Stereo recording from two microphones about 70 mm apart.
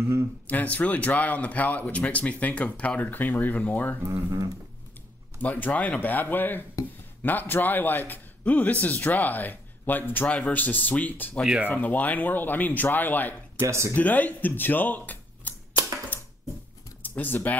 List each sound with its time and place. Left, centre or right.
0.5 s speech: left
4.3 s a sound: right
5.4 s speech: left
13.6 s speech: right
13.9 s speech: left
16.1 s a sound: left
17.0 s speech: left